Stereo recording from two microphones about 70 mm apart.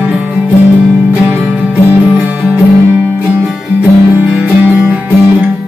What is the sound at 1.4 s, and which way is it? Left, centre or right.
Music, centre.